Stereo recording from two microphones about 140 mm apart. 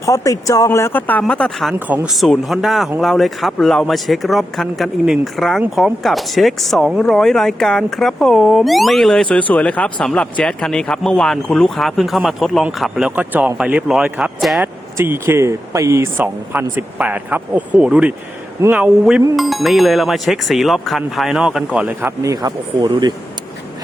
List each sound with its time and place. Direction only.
0.0 s speech: 25° left (ahead or behind); by 14.6 s 5° right (ahead or behind)
14.6 s speech: 15° right (ahead or behind)
22.2 s speech: 25° right (ahead or behind)